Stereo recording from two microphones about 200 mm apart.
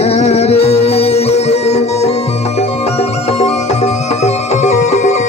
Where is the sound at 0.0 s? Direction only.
30° left (ahead or behind).